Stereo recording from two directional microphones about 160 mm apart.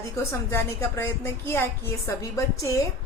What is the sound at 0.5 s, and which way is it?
A woman's voice, 15° left (ahead or behind).